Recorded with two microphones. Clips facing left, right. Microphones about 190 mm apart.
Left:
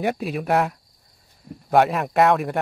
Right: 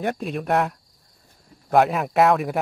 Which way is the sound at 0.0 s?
5° left (ahead or behind).